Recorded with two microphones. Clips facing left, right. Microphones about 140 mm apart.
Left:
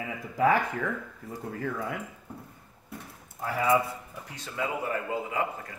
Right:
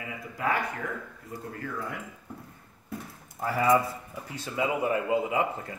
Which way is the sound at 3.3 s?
Centre (ahead or behind).